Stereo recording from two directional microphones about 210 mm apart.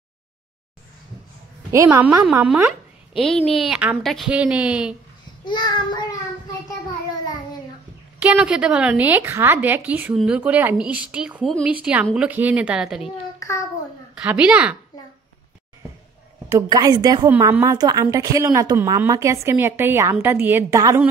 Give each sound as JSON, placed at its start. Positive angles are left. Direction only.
{"t": 1.7, "sound": "a woman's voice", "side_deg": -15}
{"t": 5.4, "sound": "child singing", "side_deg": 20}
{"t": 8.2, "sound": "a woman's voice", "side_deg": -5}
{"t": 14.1, "sound": "a woman's voice", "side_deg": -5}
{"t": 16.4, "sound": "a woman's voice", "side_deg": -15}